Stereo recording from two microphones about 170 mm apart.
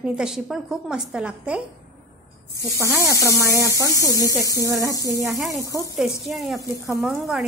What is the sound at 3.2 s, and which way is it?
Speech, 20° right (ahead or behind).